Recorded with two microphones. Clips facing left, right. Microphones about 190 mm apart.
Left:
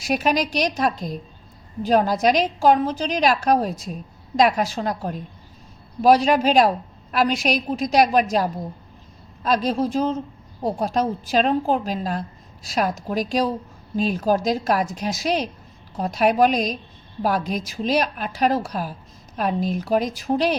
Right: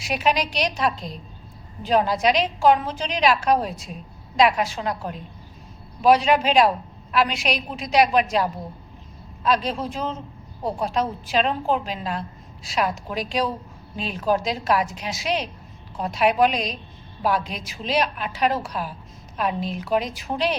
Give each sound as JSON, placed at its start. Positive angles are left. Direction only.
{"t": 0.0, "sound": "a woman's voice", "side_deg": 45}